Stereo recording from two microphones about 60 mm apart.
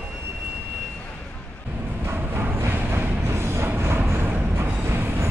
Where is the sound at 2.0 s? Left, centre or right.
Right.